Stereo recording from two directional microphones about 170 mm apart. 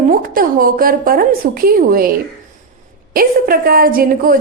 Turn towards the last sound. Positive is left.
turn(degrees=-55)  # may be behind; listen again after turning